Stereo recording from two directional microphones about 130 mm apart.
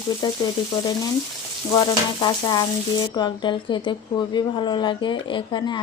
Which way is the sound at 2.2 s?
35° left (ahead or behind).